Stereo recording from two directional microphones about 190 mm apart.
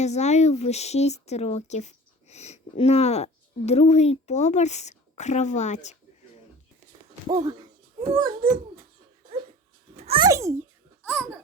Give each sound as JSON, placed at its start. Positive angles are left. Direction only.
{"t": 0.0, "sound": "speech", "side_deg": 35}
{"t": 7.3, "sound": "speech", "side_deg": -20}
{"t": 9.9, "sound": "a child's voice", "side_deg": -30}